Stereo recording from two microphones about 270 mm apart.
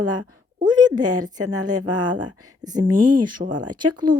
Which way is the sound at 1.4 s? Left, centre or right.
Right.